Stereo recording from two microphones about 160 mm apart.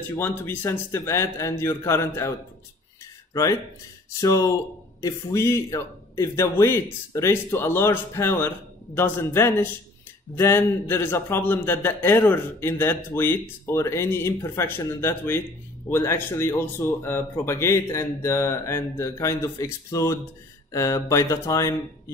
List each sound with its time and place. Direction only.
0.5 s a man's voice: 15° left (ahead or behind)
4.1 s a man's voice: 20° left (ahead or behind)